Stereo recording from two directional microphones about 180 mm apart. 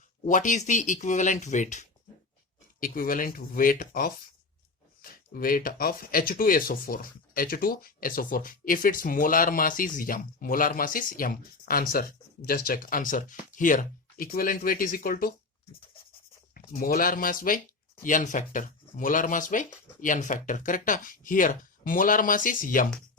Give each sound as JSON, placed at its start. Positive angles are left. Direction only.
{"t": 0.3, "sound": "speech", "side_deg": 45}
{"t": 5.3, "sound": "speech", "side_deg": 50}
{"t": 16.6, "sound": "speech", "side_deg": 50}